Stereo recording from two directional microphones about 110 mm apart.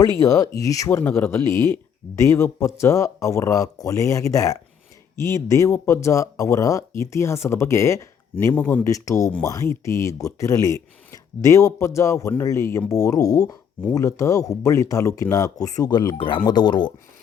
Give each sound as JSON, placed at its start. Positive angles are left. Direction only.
{"t": 0.0, "sound": "speech", "side_deg": 30}
{"t": 8.5, "sound": "speech", "side_deg": 15}
{"t": 8.9, "sound": "speech", "side_deg": 30}